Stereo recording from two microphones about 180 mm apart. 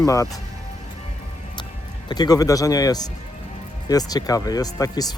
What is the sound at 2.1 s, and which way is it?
Speech, 20° left (ahead or behind).